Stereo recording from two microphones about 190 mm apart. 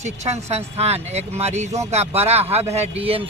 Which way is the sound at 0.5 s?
35° right (ahead or behind).